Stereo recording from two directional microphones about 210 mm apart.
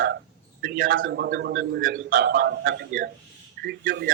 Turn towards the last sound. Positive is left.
turn(degrees=-45)  # may be behind; listen again after turning